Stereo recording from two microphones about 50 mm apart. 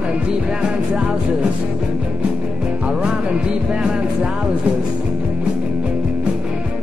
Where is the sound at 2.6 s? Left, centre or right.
Centre.